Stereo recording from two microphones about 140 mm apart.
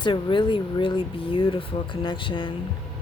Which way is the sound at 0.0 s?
35° left (ahead or behind).